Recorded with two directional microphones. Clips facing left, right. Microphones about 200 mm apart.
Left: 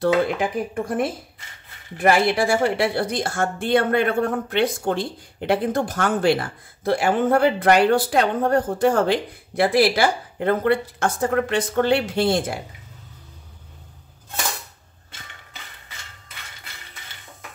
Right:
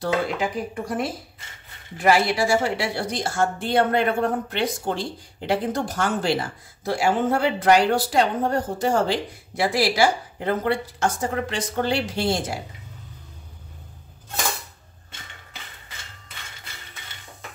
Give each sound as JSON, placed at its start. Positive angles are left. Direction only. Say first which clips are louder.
{"t": 0.0, "sound": "speech", "louder": "left 4 dB", "side_deg": 55}